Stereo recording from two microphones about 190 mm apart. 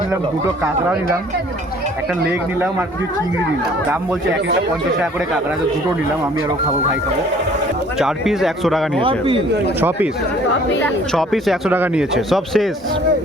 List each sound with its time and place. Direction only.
7.9 s speech: centre (ahead or behind)
9.0 s speech: 25° right (ahead or behind)
10.8 s speech: centre (ahead or behind)